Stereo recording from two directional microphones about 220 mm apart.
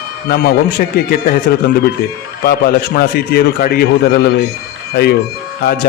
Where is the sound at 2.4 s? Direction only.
45° left (ahead or behind).